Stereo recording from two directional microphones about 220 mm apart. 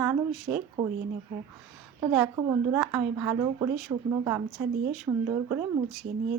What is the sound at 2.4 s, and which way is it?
A woman's voice, 15° right (ahead or behind).